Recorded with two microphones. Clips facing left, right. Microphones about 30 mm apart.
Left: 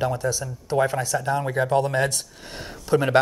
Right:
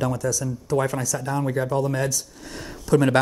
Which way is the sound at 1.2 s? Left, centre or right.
Centre.